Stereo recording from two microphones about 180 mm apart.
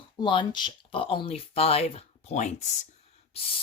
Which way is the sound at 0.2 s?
25° left (ahead or behind).